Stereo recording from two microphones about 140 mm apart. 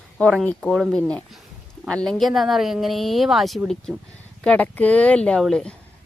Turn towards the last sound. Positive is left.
turn(degrees=5)  # may be behind; listen again after turning